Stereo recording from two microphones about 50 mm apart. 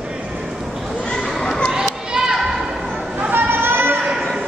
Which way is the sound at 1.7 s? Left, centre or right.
Centre.